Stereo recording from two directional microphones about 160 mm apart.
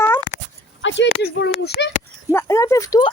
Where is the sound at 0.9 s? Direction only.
90° left.